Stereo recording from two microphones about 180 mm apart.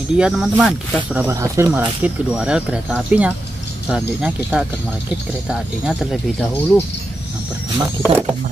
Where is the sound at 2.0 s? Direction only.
5° right (ahead or behind).